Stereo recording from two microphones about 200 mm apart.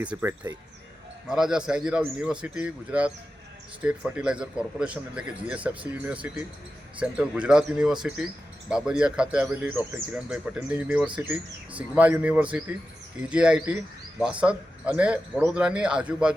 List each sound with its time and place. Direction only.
0.0 s a man's voice: 10° right (ahead or behind)